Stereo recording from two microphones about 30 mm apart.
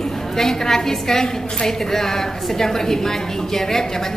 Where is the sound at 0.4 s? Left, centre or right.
Centre.